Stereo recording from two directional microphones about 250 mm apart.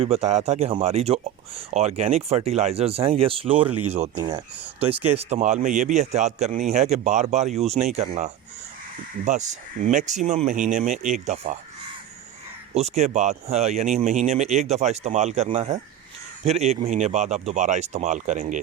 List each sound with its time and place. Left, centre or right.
0.0 s speech: right
3.7 s speech: right
3.9 s speech: right
12.7 s speech: right